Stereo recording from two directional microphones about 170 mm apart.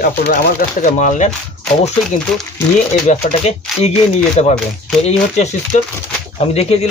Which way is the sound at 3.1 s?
40° left (ahead or behind).